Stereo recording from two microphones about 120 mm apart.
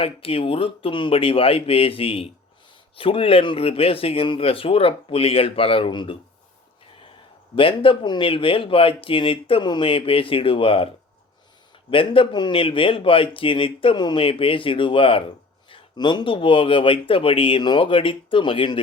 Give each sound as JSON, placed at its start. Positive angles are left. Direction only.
{"t": 0.0, "sound": "speech", "side_deg": 50}
{"t": 7.5, "sound": "speech", "side_deg": 50}
{"t": 11.9, "sound": "speech", "side_deg": 50}